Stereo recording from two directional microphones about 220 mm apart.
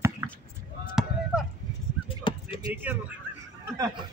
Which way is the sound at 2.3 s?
20° left (ahead or behind).